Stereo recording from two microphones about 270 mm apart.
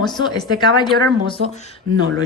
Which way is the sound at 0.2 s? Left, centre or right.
Centre.